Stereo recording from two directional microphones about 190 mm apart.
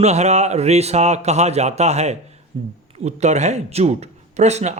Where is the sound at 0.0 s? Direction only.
35° right (ahead or behind).